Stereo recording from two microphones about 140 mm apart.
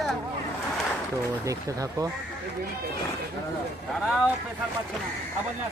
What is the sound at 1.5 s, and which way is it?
Speech, 25° right (ahead or behind).